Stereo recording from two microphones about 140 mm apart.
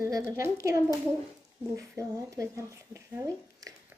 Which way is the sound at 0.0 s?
20° right (ahead or behind).